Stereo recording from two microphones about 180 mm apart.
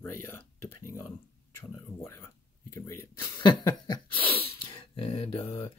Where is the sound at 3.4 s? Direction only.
25° left (ahead or behind).